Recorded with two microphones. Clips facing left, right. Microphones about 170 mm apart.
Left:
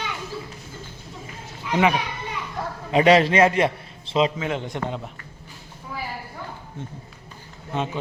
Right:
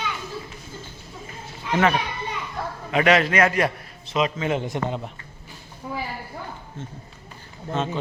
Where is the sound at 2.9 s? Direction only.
30° left (ahead or behind).